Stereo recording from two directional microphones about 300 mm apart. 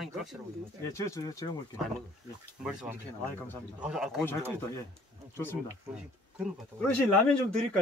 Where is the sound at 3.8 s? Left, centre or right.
Centre.